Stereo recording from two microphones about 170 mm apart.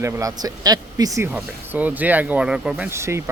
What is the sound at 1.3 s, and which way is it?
Speech, 10° right (ahead or behind).